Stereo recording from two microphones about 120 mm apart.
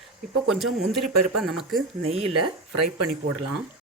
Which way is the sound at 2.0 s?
55° right (ahead or behind).